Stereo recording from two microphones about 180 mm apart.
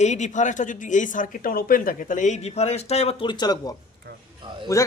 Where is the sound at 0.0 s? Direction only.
40° left (ahead or behind).